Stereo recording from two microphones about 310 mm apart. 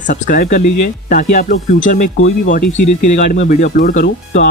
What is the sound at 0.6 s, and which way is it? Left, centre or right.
Speech, left.